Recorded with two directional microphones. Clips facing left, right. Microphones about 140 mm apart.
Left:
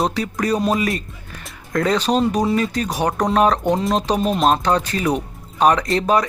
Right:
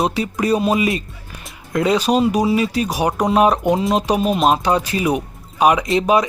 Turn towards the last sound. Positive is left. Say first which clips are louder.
# right 2 dB
turn(degrees=-10)  # may be behind; listen again after turning